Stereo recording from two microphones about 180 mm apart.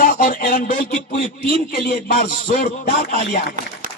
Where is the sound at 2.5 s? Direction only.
45° left (ahead or behind).